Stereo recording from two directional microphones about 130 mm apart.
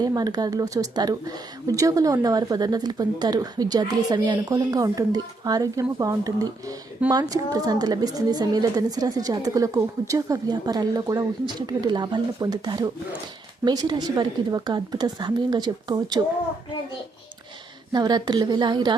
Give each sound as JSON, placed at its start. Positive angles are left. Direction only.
{"t": 0.0, "sound": "a woman's voice", "side_deg": -30}
{"t": 17.9, "sound": "a woman's voice", "side_deg": -35}